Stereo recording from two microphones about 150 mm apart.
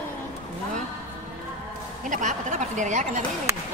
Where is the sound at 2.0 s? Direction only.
60° right (ahead or behind).